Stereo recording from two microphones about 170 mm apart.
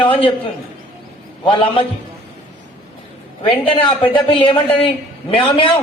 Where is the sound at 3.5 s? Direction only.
30° left (ahead or behind).